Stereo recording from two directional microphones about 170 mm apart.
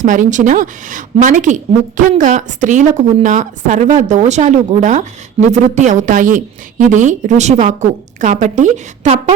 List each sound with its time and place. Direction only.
0.0 s a woman's voice: 50° right (ahead or behind)